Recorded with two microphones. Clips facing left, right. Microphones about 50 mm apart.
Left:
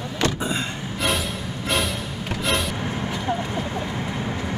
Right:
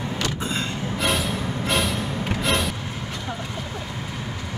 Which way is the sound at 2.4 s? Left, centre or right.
Centre.